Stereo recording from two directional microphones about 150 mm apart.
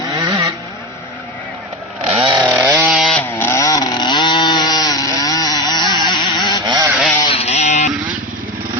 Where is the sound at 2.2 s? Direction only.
30° right (ahead or behind).